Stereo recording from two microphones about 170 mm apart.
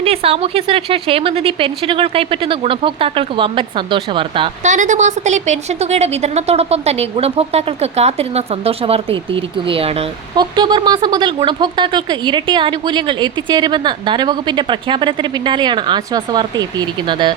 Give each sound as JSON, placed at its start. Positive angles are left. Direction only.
{"t": 0.0, "sound": "a woman's voice", "side_deg": -35}
{"t": 4.6, "sound": "a woman's voice", "side_deg": -45}